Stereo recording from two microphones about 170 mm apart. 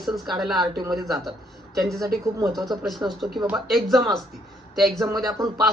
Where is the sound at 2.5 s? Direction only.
Centre (ahead or behind).